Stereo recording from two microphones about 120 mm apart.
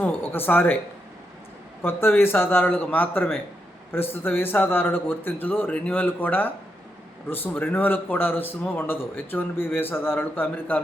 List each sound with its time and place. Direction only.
0.0 s speech: 15° left (ahead or behind)
1.8 s a man's voice: 20° left (ahead or behind)